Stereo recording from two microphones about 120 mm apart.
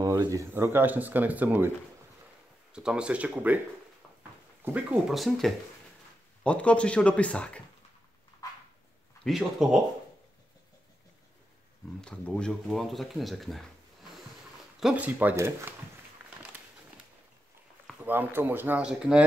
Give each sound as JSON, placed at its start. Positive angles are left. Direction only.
{"t": 0.0, "sound": "speech", "side_deg": -30}
{"t": 2.7, "sound": "speech", "side_deg": -5}
{"t": 4.6, "sound": "speech", "side_deg": -10}
{"t": 5.1, "sound": "speech", "side_deg": 0}
{"t": 6.4, "sound": "speech", "side_deg": 10}
{"t": 8.4, "sound": "dog", "side_deg": 30}
{"t": 9.2, "sound": "speech", "side_deg": -5}
{"t": 12.0, "sound": "speech", "side_deg": 5}
{"t": 14.8, "sound": "speech", "side_deg": -10}
{"t": 18.0, "sound": "speech", "side_deg": -15}